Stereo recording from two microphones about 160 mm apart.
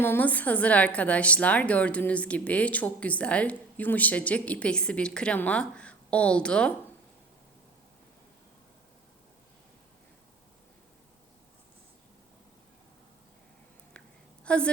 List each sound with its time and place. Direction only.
0.0 s a woman's voice: 10° left (ahead or behind)
14.4 s a woman's voice: 5° left (ahead or behind)